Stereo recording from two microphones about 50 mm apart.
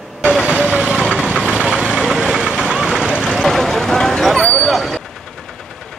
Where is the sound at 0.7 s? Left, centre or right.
Right.